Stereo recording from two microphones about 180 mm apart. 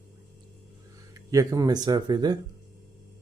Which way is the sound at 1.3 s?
20° right (ahead or behind).